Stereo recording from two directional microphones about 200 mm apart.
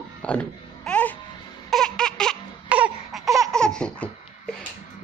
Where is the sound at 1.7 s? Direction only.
5° left (ahead or behind).